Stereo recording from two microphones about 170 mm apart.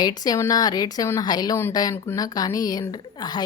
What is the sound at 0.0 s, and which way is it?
Speech, 25° left (ahead or behind).